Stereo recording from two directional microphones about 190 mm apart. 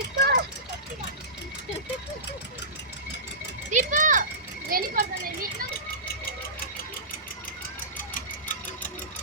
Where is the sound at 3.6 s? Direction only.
40° right (ahead or behind).